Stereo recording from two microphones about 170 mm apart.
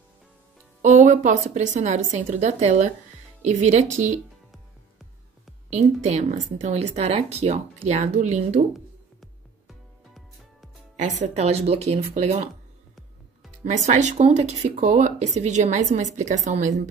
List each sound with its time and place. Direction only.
0.8 s speech: 45° right (ahead or behind)
5.7 s speech: 45° right (ahead or behind)
9.2 s music: centre (ahead or behind)
11.0 s a woman's voice: 40° right (ahead or behind)
13.7 s speech: 45° right (ahead or behind)